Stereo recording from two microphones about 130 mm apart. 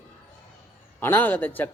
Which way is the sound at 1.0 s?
15° left (ahead or behind).